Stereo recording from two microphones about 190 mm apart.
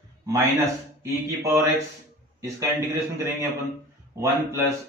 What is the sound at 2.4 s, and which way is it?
Speech, 15° right (ahead or behind).